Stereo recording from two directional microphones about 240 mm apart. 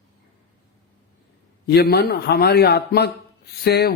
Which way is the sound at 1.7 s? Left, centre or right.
Left.